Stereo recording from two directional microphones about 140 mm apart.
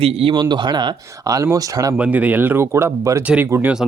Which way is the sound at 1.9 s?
10° right (ahead or behind).